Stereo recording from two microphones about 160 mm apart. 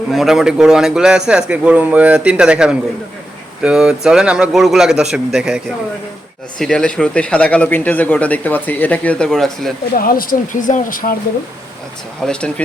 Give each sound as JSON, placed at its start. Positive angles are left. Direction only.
{"t": 0.1, "sound": "a man's voice", "side_deg": 0}
{"t": 9.9, "sound": "speech", "side_deg": 65}
{"t": 12.2, "sound": "a man's voice", "side_deg": 5}